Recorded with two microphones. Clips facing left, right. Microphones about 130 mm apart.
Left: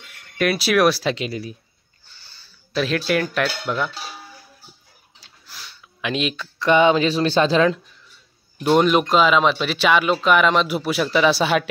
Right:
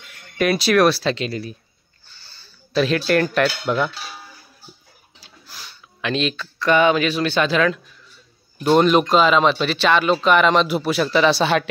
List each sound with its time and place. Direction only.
0.4 s speech: 5° left (ahead or behind)
2.2 s a sound: 10° left (ahead or behind)
3.4 s cutlery: 5° right (ahead or behind)
5.2 s speech: centre (ahead or behind); by 7.8 s 30° left (ahead or behind)
8.6 s speech: 5° left (ahead or behind)